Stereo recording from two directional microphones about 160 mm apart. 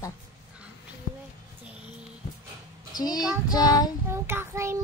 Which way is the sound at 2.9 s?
25° left (ahead or behind).